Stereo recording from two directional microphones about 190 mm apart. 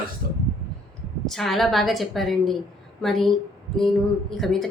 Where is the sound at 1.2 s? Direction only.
Centre (ahead or behind).